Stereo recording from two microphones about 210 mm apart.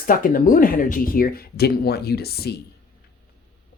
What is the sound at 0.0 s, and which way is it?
Speech, 40° left (ahead or behind).